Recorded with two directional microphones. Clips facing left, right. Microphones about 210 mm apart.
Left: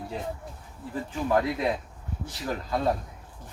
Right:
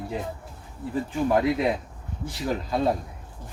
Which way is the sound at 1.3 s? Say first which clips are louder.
Right 2 dB; 20° right (ahead or behind).